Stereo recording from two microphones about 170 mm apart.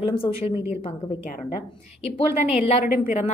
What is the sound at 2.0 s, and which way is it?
Speech, 35° left (ahead or behind).